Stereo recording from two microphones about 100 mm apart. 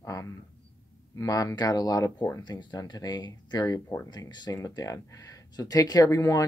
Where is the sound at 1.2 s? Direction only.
35° left (ahead or behind).